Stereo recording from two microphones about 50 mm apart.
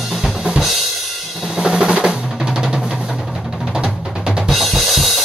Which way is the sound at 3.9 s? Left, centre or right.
Centre.